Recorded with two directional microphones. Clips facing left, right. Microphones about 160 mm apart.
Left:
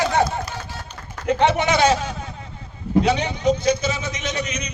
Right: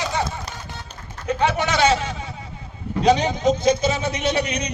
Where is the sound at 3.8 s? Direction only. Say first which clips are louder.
Right 4 dB; 60° right (ahead or behind).